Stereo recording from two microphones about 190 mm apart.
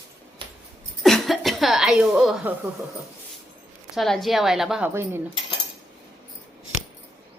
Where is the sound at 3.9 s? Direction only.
Centre (ahead or behind).